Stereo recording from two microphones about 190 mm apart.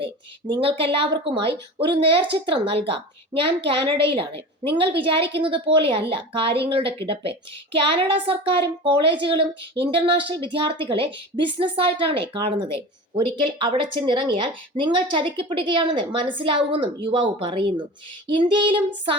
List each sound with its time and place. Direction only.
0.0 s a woman's voice: 25° right (ahead or behind)